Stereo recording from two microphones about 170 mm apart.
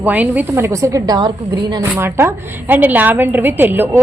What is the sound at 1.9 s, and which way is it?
A woman's voice, 15° right (ahead or behind).